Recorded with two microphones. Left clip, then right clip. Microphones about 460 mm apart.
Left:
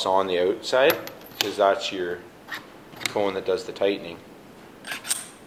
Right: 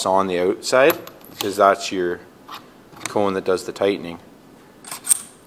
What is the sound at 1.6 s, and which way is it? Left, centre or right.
Speech, right.